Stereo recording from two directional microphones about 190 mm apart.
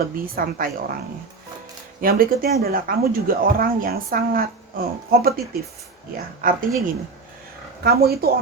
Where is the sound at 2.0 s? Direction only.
50° right (ahead or behind).